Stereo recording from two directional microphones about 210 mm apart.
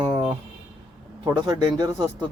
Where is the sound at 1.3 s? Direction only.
15° right (ahead or behind).